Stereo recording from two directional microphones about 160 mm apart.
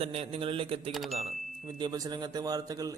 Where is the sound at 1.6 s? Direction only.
25° right (ahead or behind).